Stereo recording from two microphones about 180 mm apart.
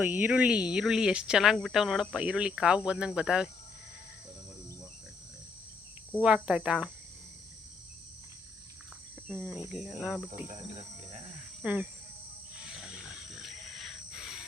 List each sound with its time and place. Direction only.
0.0 s speech: 10° right (ahead or behind)
6.2 s speech: 5° right (ahead or behind)
9.2 s speech: 5° right (ahead or behind)
11.6 s cricket: 10° right (ahead or behind)
12.6 s wild animals: 5° right (ahead or behind)